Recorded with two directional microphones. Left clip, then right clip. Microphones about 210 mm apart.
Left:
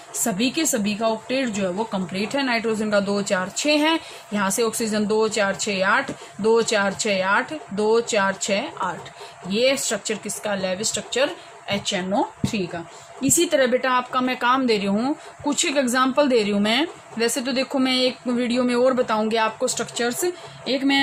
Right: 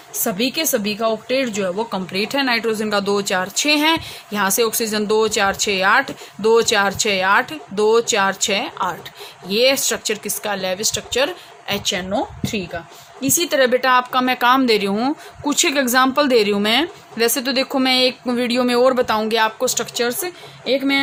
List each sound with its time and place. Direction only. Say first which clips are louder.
0.3 s a woman's voice: right 3 dB; 50° right (ahead or behind)